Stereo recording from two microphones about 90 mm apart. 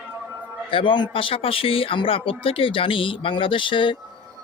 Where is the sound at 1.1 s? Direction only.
85° left; by 3.9 s 65° left (ahead or behind).